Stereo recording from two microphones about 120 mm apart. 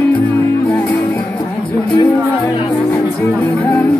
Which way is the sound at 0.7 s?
15° left (ahead or behind).